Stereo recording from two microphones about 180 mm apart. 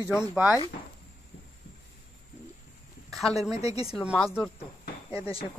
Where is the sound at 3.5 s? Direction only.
35° left (ahead or behind).